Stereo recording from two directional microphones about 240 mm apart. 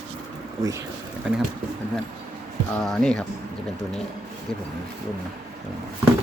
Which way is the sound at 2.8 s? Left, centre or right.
Centre.